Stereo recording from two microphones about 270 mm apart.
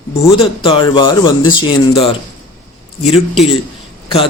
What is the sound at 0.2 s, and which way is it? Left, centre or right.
Speech, centre.